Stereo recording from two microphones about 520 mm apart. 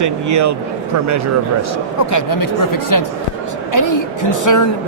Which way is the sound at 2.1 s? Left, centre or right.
Left.